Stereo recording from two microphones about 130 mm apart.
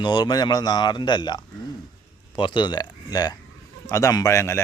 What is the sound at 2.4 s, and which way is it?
Speech, 40° left (ahead or behind).